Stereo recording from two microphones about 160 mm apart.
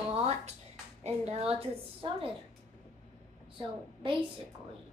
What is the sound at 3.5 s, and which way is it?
Speech, 30° right (ahead or behind).